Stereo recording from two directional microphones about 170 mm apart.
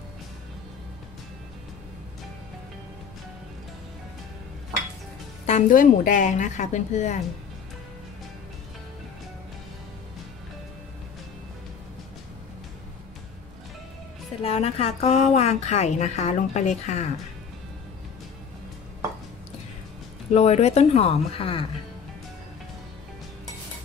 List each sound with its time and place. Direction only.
5.5 s a woman's voice: 50° left (ahead or behind)
14.4 s a woman's voice: 35° left (ahead or behind)
20.3 s a woman's voice: 40° left (ahead or behind)